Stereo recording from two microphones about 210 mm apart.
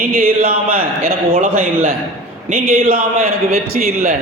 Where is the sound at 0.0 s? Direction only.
45° right (ahead or behind).